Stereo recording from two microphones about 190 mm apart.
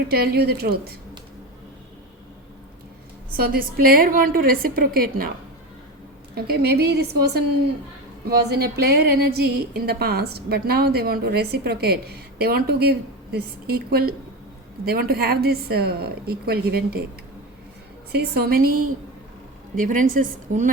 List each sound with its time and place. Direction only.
0.1 s a woman's voice: 55° right (ahead or behind)
3.3 s a woman's voice: 50° right (ahead or behind)
6.3 s a woman's voice: 55° right (ahead or behind)
18.1 s a woman's voice: 55° right (ahead or behind)